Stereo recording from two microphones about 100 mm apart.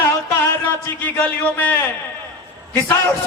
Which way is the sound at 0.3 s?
20° left (ahead or behind).